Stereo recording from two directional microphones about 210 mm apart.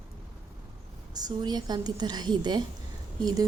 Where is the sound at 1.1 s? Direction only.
20° right (ahead or behind).